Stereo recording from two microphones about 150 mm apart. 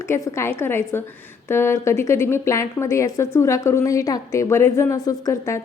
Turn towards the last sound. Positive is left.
turn(degrees=20)  # may be behind; listen again after turning